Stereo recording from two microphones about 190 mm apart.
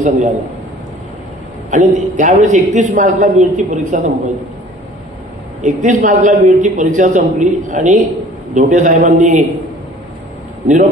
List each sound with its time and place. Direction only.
0.0 s a man's voice: 35° right (ahead or behind)
1.7 s a man's voice: 40° right (ahead or behind)
5.6 s a man's voice: 40° right (ahead or behind)